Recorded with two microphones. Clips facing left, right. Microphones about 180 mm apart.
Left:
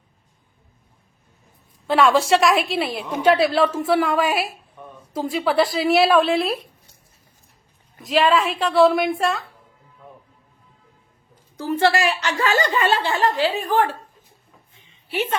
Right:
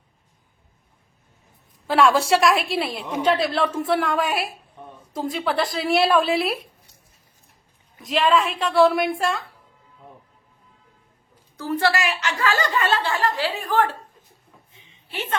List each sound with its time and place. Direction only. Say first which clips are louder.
1.9 s a woman's voice: left 1 dB; centre (ahead or behind)
8.0 s a woman's voice: left 2 dB; centre (ahead or behind)
11.5 s a woman's voice: left 3 dB; 20° left (ahead or behind)
12.5 s a woman's voice: left 2 dB; 20° left (ahead or behind)